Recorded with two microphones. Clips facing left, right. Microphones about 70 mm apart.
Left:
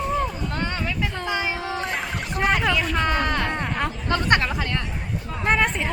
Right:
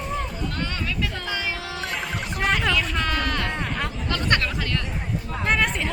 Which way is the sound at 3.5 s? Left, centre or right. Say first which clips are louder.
Left 2 dB; centre.